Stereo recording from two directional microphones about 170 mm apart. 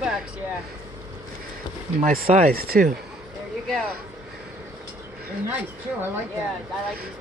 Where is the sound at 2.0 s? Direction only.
55° right (ahead or behind).